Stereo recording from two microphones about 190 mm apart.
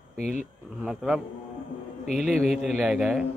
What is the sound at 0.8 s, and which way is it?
Speech, centre (ahead or behind).